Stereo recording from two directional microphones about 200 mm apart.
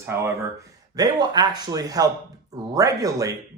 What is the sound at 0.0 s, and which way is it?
Speech, 10° right (ahead or behind).